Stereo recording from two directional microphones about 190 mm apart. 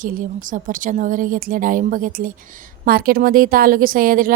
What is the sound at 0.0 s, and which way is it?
A woman's voice, 45° right (ahead or behind).